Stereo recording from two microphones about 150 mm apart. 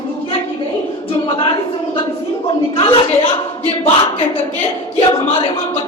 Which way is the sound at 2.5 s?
35° left (ahead or behind).